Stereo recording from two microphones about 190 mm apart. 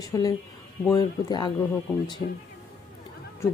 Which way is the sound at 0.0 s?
20° left (ahead or behind).